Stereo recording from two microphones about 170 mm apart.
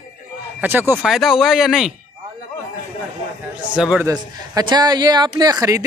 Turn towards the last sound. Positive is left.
turn(degrees=-20)  # may be behind; listen again after turning